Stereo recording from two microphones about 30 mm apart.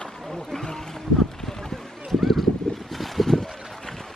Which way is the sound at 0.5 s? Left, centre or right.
Centre.